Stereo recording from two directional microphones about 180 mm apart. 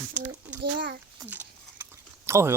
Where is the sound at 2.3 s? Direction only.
15° right (ahead or behind).